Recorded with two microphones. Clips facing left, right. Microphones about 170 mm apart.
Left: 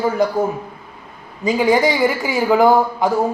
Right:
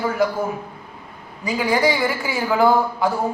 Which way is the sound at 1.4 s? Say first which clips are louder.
Left 4 dB; 25° left (ahead or behind).